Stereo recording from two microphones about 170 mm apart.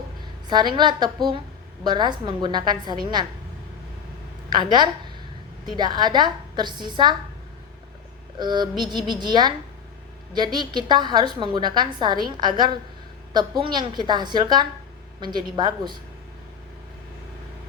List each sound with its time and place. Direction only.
0.4 s a woman's voice: 25° right (ahead or behind)
4.4 s a woman's voice: 25° right (ahead or behind)
8.4 s a woman's voice: 25° right (ahead or behind)